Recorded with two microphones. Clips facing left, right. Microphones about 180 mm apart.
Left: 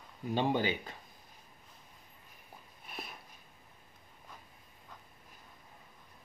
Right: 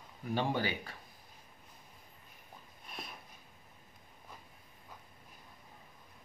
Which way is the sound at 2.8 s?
Centre (ahead or behind).